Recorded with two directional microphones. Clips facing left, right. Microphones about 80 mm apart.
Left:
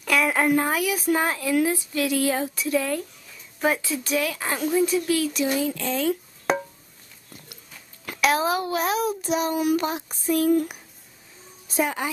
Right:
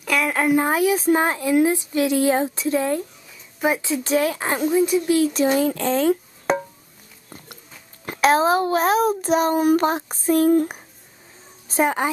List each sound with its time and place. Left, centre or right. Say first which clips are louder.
0.0 s a sound: right 1 dB; centre
0.6 s speech: right 5 dB; right
5.3 s speech: right 5 dB; right
6.5 s music: right 2 dB; centre
8.0 s a woman's voice: right 5 dB; right